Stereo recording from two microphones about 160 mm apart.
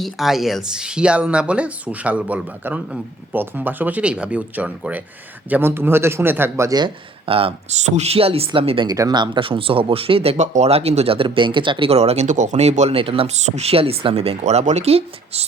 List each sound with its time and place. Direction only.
0.0 s a man's voice: centre (ahead or behind); by 15.4 s 40° right (ahead or behind)